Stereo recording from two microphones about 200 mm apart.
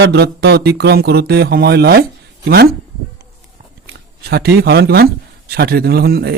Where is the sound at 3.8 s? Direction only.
50° right (ahead or behind).